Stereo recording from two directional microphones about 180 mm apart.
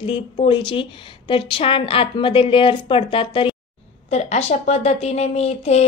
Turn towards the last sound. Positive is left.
turn(degrees=35)  # may be behind; listen again after turning